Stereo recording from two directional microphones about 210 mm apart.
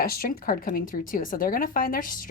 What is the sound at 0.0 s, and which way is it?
A woman's voice, 45° left (ahead or behind).